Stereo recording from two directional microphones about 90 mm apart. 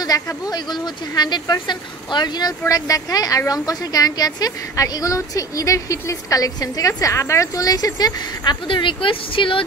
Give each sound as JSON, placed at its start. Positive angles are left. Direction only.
{"t": 0.0, "sound": "a woman's voice", "side_deg": 45}
{"t": 8.6, "sound": "speech", "side_deg": 65}